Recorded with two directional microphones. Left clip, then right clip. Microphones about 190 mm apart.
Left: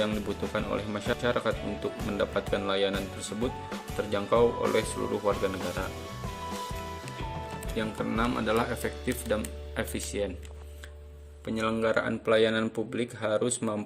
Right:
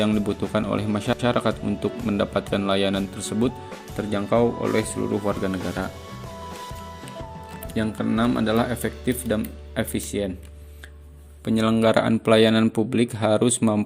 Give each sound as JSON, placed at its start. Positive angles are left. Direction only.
{"t": 0.0, "sound": "speech", "side_deg": -35}
{"t": 3.9, "sound": "speech", "side_deg": -20}
{"t": 5.4, "sound": "speech", "side_deg": -25}
{"t": 7.8, "sound": "speech", "side_deg": -25}
{"t": 11.4, "sound": "speech", "side_deg": -45}